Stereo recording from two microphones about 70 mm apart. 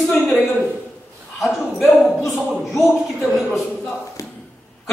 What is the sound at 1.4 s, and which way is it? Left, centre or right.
A man's voice, centre.